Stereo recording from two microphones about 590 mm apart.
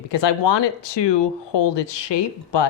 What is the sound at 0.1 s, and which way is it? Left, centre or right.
Speech, left.